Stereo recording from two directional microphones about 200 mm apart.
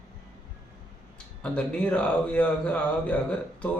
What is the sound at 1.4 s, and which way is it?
A man's voice, 5° left (ahead or behind).